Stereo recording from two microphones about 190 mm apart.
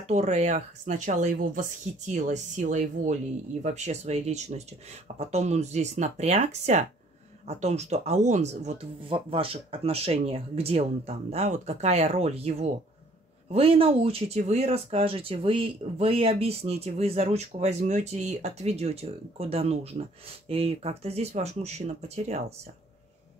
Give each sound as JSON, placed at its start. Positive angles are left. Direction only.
{"t": 0.1, "sound": "speech", "side_deg": -35}